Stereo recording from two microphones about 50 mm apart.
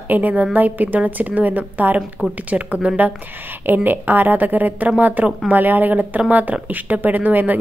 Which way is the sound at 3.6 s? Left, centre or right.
Right.